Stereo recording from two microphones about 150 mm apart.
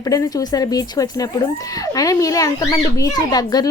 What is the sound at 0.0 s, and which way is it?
Speech, 25° left (ahead or behind).